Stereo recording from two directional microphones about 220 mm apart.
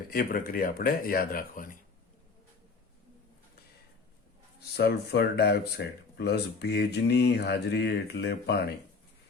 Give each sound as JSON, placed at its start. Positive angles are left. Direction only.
{"t": 0.1, "sound": "speech", "side_deg": 40}
{"t": 4.8, "sound": "speech", "side_deg": 45}